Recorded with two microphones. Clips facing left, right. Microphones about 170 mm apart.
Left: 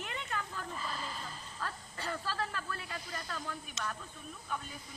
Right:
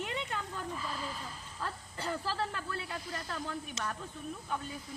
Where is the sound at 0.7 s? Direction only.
10° right (ahead or behind).